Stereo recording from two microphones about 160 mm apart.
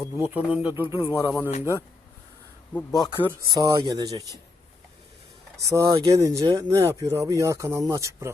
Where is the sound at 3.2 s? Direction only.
20° right (ahead or behind).